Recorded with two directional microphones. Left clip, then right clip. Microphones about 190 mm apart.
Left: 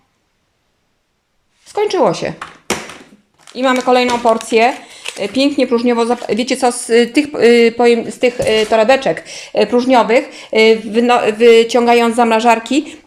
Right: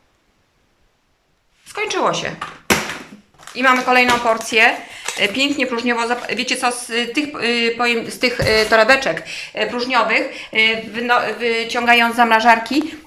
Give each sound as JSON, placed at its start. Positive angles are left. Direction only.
{"t": 1.6, "sound": "speech", "side_deg": 30}
{"t": 3.5, "sound": "speech", "side_deg": 20}